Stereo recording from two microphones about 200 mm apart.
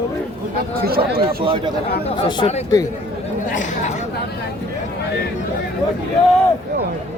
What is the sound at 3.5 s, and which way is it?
Speech, 40° left (ahead or behind).